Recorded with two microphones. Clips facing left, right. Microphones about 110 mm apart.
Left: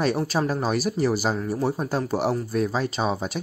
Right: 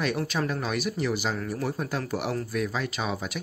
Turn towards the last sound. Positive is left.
turn(degrees=30)  # may be behind; listen again after turning